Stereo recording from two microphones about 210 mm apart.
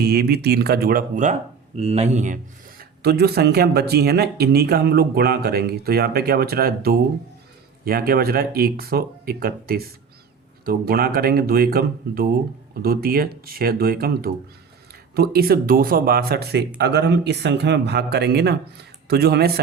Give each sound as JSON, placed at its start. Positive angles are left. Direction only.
{"t": 0.0, "sound": "speech", "side_deg": -50}